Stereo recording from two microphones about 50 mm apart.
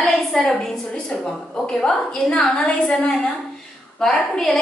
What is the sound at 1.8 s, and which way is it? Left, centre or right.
A woman's voice, centre.